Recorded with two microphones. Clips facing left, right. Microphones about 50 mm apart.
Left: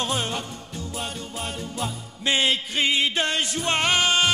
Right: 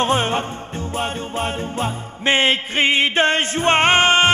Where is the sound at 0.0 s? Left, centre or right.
Right.